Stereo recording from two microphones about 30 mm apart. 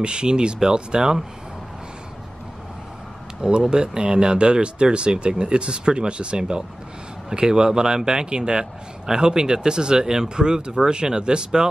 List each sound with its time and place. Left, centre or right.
0.0 s a man's voice: right
3.3 s a man's voice: right